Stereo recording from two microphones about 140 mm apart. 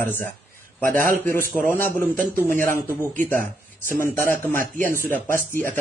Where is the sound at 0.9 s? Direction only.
75° right (ahead or behind).